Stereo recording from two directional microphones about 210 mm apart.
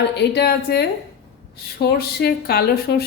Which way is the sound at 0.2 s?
50° left (ahead or behind).